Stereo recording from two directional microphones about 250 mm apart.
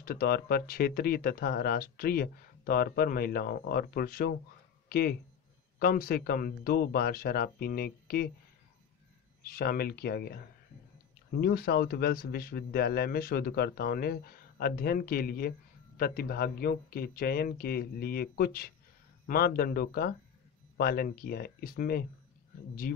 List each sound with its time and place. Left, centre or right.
0.0 s speech: left
4.8 s a sound: left
5.8 s speech: left
9.5 s speech: left
11.4 s speech: left